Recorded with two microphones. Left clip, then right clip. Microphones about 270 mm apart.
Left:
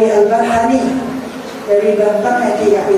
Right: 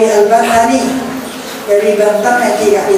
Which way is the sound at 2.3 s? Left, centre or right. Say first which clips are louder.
Right 3 dB; centre.